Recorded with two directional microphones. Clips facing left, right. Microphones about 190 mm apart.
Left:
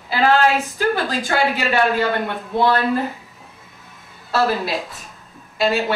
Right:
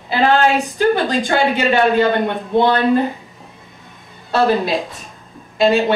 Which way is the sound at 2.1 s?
20° right (ahead or behind).